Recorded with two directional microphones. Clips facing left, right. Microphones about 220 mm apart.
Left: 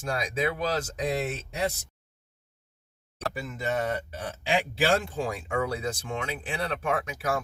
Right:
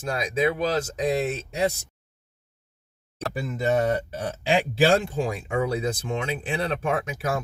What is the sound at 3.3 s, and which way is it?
Speech, 35° right (ahead or behind).